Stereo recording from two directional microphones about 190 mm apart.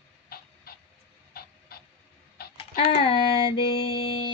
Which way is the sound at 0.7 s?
55° left (ahead or behind).